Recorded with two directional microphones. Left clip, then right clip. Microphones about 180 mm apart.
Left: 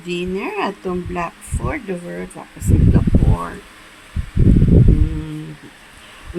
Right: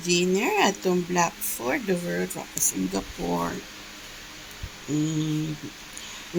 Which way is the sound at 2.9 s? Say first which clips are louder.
Left 7 dB; 5° right (ahead or behind).